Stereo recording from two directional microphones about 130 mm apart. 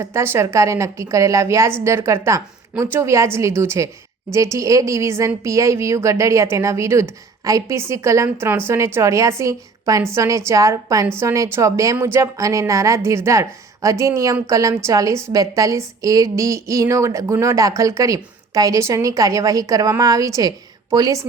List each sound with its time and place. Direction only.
0.0 s a woman's voice: 20° right (ahead or behind)